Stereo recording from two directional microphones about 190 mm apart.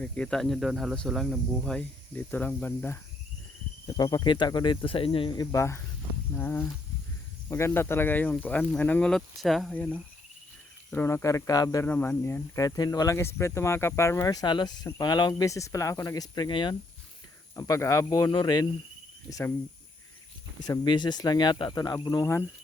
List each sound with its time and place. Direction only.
0.0 s speech: 5° left (ahead or behind)
3.9 s speech: 20° left (ahead or behind)
20.6 s speech: 20° left (ahead or behind)